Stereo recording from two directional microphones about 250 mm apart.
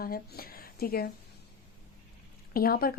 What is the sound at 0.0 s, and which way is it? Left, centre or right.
A woman's voice, left.